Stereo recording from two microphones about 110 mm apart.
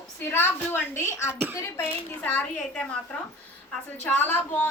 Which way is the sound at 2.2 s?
15° left (ahead or behind).